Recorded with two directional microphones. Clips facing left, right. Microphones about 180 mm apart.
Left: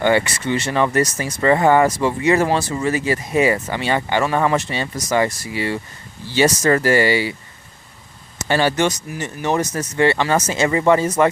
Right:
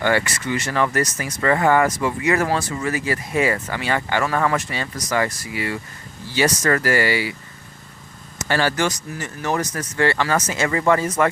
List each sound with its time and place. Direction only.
0.0 s speech: 20° left (ahead or behind)
8.4 s speech: 20° left (ahead or behind)